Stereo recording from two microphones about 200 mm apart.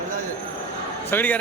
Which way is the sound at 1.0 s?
10° left (ahead or behind).